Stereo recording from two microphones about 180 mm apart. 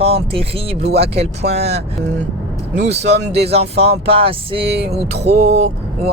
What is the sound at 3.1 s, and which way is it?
Speech, 35° right (ahead or behind).